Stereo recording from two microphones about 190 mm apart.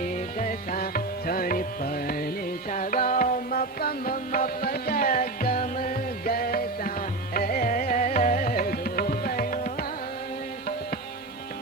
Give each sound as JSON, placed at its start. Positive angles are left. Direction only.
{"t": 0.0, "sound": "music", "side_deg": 45}